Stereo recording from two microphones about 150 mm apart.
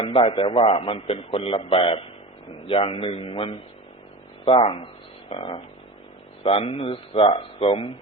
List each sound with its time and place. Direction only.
0.0 s a man's voice: 40° left (ahead or behind)